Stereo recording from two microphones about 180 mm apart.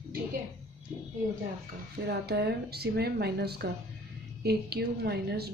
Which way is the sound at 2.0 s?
65° right (ahead or behind).